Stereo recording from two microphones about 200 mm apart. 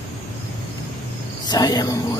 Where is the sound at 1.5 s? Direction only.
20° left (ahead or behind).